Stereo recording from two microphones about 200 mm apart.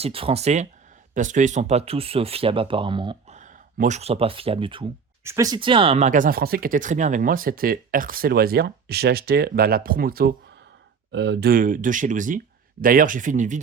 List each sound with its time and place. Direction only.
0.0 s speech: 30° right (ahead or behind)
3.3 s speech: 40° right (ahead or behind)
5.2 s speech: 15° right (ahead or behind); by 10.3 s 45° right (ahead or behind)
11.1 s speech: 60° right (ahead or behind); by 13.6 s 40° right (ahead or behind)